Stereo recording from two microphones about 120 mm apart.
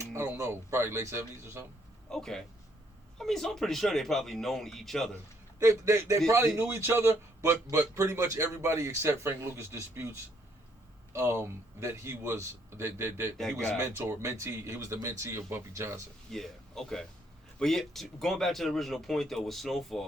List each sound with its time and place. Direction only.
0.0 s speech: 20° right (ahead or behind)
2.0 s speech: 5° left (ahead or behind)
5.5 s a man's voice: 25° right (ahead or behind)
13.3 s speech: centre (ahead or behind)
13.7 s a man's voice: 25° right (ahead or behind)
16.3 s speech: 5° left (ahead or behind)